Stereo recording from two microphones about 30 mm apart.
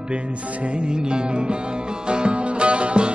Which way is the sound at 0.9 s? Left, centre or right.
Right.